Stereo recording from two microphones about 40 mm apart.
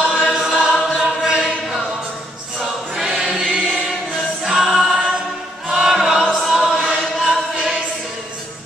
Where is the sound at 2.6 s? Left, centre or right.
Centre.